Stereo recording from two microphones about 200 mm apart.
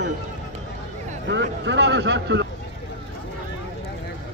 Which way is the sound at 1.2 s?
60° right (ahead or behind).